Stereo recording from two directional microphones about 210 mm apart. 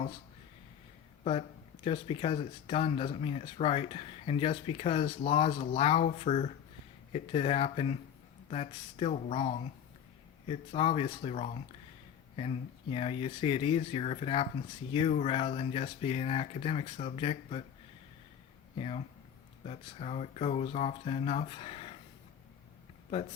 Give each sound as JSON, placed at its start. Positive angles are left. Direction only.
{"t": 1.2, "sound": "speech", "side_deg": 30}
{"t": 18.8, "sound": "speech", "side_deg": 25}